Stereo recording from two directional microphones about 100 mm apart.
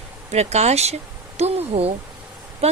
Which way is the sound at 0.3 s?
90° right.